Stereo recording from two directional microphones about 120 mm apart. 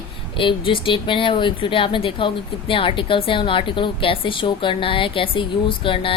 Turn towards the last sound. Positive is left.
turn(degrees=45)  # may be behind; listen again after turning